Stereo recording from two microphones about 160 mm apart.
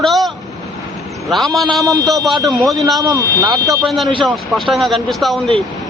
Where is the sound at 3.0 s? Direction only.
20° right (ahead or behind).